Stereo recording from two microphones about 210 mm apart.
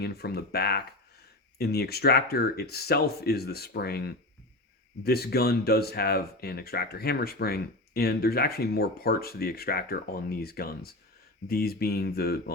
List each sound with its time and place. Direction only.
0.0 s speech: 50° left (ahead or behind)